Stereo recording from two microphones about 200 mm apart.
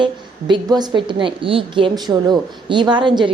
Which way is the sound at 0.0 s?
25° right (ahead or behind).